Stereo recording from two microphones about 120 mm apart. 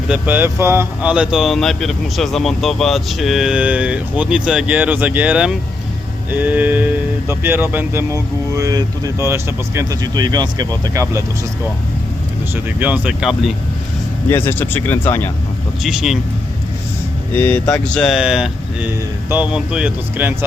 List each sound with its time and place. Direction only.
0.1 s speech: 15° right (ahead or behind)
1.0 s speech: 10° right (ahead or behind)
10.0 s speech: 35° right (ahead or behind)
12.5 s speech: 10° right (ahead or behind)
14.3 s speech: 15° left (ahead or behind)
15.8 s speech: 5° right (ahead or behind)
17.3 s speech: 15° left (ahead or behind); by 20.3 s 10° right (ahead or behind)